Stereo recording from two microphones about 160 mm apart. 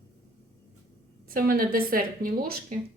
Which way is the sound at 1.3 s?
65° right (ahead or behind).